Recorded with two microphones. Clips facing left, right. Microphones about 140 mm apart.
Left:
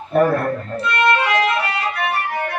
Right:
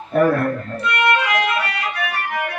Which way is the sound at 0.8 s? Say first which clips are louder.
Left 1 dB; 30° left (ahead or behind).